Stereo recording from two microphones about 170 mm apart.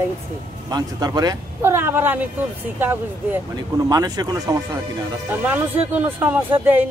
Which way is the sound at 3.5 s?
20° right (ahead or behind).